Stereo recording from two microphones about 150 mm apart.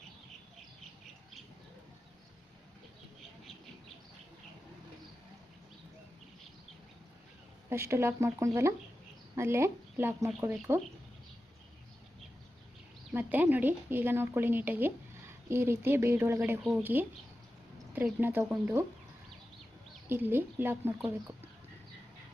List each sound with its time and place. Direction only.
7.7 s a woman's voice: 15° right (ahead or behind)
13.1 s a woman's voice: 10° right (ahead or behind)
20.1 s a woman's voice: 15° right (ahead or behind)